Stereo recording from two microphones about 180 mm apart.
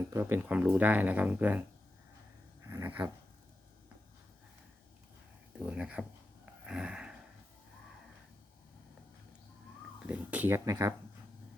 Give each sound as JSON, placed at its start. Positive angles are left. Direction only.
{"t": 0.1, "sound": "speech", "side_deg": -10}
{"t": 2.6, "sound": "dog", "side_deg": -20}
{"t": 5.5, "sound": "speech", "side_deg": -5}
{"t": 6.7, "sound": "a sound", "side_deg": -5}
{"t": 10.1, "sound": "speech", "side_deg": -10}